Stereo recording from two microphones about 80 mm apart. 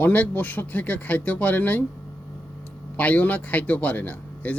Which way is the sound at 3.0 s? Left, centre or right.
Centre.